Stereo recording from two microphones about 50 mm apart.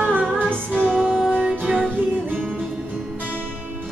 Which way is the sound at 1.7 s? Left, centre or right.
Centre.